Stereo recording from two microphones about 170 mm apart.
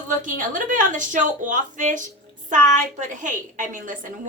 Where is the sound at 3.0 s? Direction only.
45° right (ahead or behind).